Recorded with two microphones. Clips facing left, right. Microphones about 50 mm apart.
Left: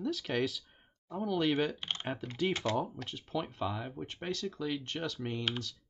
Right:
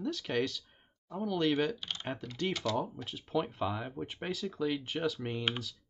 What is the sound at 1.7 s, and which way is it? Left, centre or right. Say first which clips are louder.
Speech: left 1 dB; left.